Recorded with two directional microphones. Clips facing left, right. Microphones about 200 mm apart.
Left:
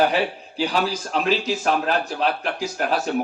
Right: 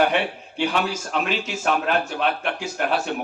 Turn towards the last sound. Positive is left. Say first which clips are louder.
# left 1 dB
turn(degrees=35)  # may be behind; listen again after turning